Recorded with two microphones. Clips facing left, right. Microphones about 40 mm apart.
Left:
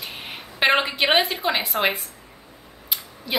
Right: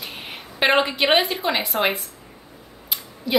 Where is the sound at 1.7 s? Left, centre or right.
Left.